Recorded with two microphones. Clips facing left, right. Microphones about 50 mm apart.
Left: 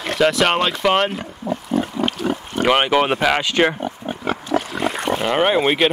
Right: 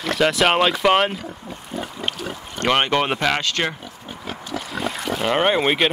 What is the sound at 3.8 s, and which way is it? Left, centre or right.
Pig, left.